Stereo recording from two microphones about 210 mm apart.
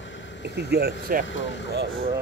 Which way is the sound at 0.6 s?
50° right (ahead or behind).